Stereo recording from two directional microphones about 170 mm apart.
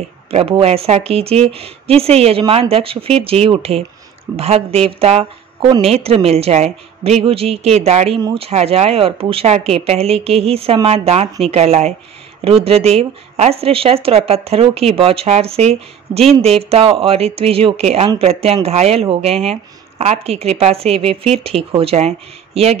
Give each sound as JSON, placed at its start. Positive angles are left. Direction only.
{"t": 0.3, "sound": "speech", "side_deg": -35}